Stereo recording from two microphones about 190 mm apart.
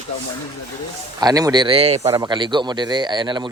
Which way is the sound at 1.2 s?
20° right (ahead or behind).